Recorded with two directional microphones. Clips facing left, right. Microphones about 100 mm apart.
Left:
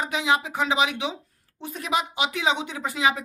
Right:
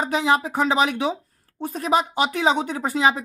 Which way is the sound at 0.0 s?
40° right (ahead or behind).